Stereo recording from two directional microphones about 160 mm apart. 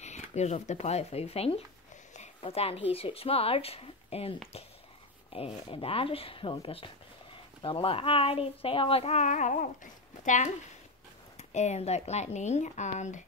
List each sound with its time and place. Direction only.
0.0 s speech: 45° left (ahead or behind)
2.1 s zipper: 40° left (ahead or behind)
2.9 s speech: 35° left (ahead or behind)